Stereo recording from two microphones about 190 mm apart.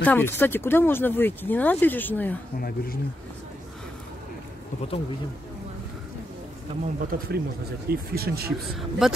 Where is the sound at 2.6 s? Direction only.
50° left (ahead or behind).